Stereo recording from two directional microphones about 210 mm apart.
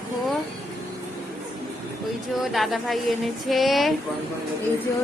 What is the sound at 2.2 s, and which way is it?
Speech, centre (ahead or behind).